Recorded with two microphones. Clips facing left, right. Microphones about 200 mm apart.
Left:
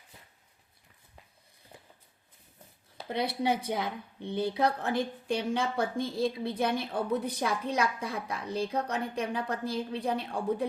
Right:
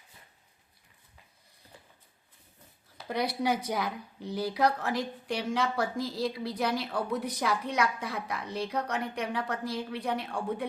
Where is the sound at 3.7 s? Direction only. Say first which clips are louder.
Even; 25° left (ahead or behind).